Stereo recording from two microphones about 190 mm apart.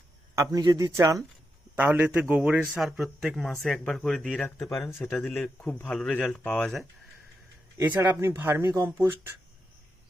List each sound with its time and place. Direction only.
0.3 s a man's voice: 20° right (ahead or behind); by 6.8 s 5° left (ahead or behind)
7.9 s speech: 10° right (ahead or behind)